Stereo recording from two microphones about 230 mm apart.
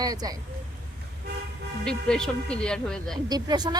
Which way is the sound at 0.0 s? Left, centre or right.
Centre.